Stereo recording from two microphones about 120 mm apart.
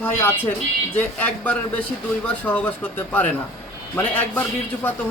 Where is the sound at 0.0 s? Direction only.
20° left (ahead or behind).